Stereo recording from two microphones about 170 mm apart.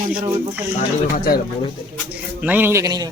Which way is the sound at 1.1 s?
55° left (ahead or behind).